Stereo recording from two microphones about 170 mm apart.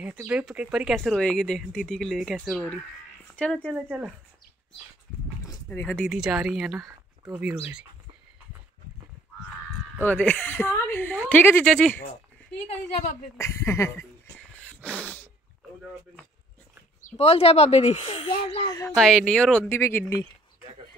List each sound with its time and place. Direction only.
0.2 s speech: 5° right (ahead or behind)
3.7 s speech: 5° right (ahead or behind)
5.7 s speech: 10° left (ahead or behind); by 7.8 s 10° right (ahead or behind)
10.0 s speech: 10° left (ahead or behind)
13.4 s a sound: 15° left (ahead or behind)
17.0 s speech: 35° left (ahead or behind)
18.9 s speech: 5° left (ahead or behind)